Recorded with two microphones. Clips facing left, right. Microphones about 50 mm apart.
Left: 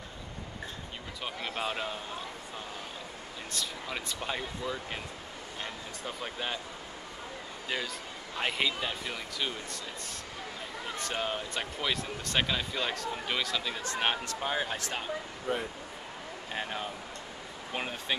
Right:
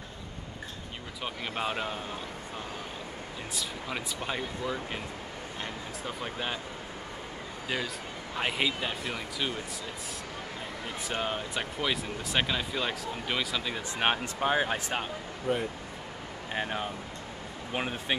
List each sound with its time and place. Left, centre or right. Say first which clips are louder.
1.2 s speech: right 2 dB; centre
3.5 s speech: right 1 dB; centre
6.0 s speech: right 1 dB; centre
8.4 s speech: right 1 dB; centre
11.0 s speech: right 1 dB; centre